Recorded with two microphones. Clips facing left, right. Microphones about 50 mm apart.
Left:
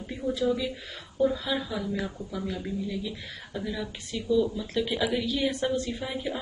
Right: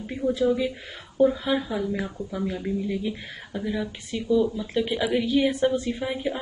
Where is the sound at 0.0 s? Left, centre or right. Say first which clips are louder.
Right 5 dB; right.